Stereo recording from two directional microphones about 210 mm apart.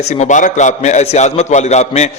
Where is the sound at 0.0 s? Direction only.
35° left (ahead or behind).